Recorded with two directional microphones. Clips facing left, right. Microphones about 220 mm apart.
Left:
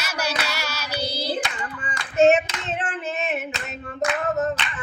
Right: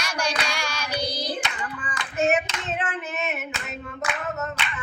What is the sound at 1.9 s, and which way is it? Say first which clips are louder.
Hands: left 7 dB; 25° left (ahead or behind).